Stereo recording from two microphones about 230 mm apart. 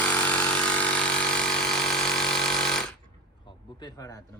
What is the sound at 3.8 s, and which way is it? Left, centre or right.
Speech, centre.